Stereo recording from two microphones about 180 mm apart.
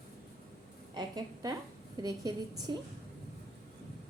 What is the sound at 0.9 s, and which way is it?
A woman's voice, 20° right (ahead or behind).